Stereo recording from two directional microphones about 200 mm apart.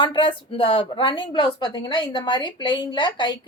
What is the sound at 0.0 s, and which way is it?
A woman's voice, 25° left (ahead or behind).